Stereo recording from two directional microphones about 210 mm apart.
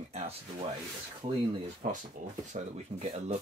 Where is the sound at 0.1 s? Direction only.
30° right (ahead or behind).